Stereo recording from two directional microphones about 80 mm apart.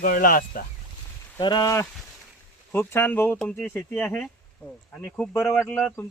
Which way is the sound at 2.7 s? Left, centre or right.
Left.